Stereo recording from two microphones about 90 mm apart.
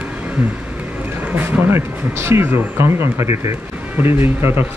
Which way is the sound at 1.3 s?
20° right (ahead or behind).